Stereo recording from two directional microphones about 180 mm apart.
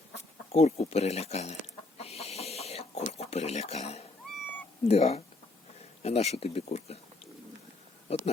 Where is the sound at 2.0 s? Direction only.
35° left (ahead or behind).